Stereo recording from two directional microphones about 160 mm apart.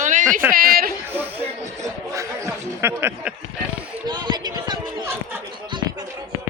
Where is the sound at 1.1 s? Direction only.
15° right (ahead or behind).